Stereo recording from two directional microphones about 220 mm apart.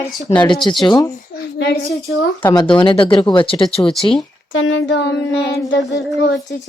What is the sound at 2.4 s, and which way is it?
Speech, 20° left (ahead or behind).